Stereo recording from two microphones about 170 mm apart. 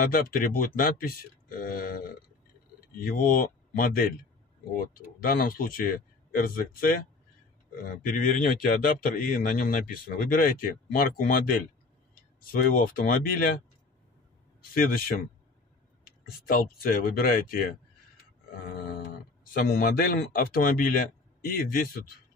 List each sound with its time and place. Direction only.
0.0 s speech: 55° left (ahead or behind)
14.7 s speech: 55° left (ahead or behind)